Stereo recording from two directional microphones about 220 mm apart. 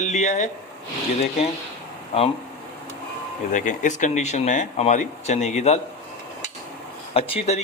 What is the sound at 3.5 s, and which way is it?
Speech, 35° left (ahead or behind).